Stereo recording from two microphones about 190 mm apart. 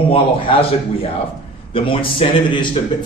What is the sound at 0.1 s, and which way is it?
Speech, 30° left (ahead or behind).